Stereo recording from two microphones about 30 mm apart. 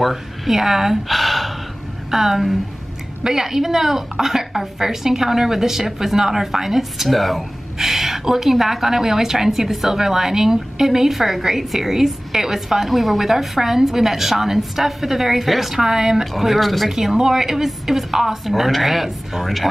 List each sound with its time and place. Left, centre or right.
0.0 s a woman's voice: centre
1.0 s gasp: centre
2.0 s a woman's voice: centre
7.1 s a woman's voice: centre
15.8 s a woman's voice: centre
16.3 s speech: centre
16.9 s a woman's voice: centre